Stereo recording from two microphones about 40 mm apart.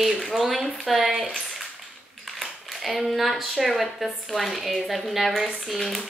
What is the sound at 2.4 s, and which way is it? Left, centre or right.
A woman's voice, centre.